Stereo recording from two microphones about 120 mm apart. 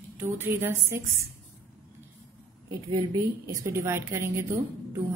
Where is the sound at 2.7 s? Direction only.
30° right (ahead or behind).